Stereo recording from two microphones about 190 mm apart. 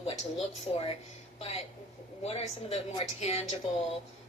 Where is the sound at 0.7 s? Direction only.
30° left (ahead or behind).